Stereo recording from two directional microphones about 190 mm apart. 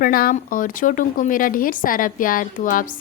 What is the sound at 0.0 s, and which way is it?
Speech, 50° left (ahead or behind).